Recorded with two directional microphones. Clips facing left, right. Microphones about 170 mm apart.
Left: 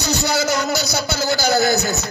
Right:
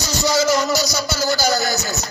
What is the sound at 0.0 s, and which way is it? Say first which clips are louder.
A man's voice: right 1 dB; 60° left (ahead or behind).